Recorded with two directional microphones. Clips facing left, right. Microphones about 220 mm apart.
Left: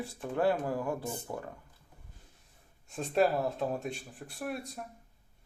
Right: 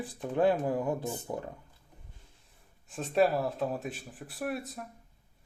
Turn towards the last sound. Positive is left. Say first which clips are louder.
# right 3 dB
turn(degrees=0)  # may be behind; listen again after turning